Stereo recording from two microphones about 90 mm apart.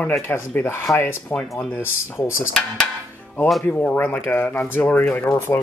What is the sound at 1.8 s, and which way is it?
Speech, 30° left (ahead or behind).